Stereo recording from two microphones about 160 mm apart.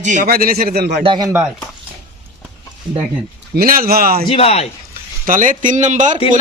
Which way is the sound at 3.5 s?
70° right (ahead or behind).